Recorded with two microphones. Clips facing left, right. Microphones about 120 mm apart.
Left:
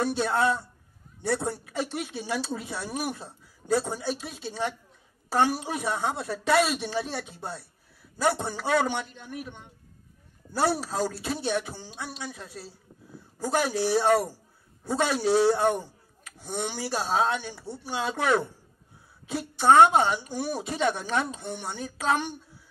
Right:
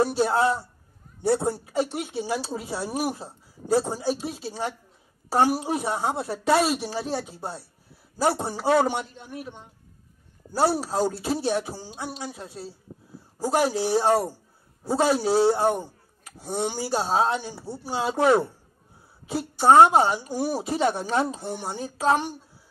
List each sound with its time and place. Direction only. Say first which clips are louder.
0.0 s a woman's voice: right 3 dB; 30° right (ahead or behind)